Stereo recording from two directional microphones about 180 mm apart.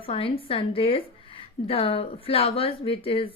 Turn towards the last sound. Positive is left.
turn(degrees=30)  # may be behind; listen again after turning